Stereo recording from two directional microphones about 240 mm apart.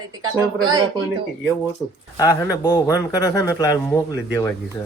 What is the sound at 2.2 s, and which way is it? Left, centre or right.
A man's voice, centre.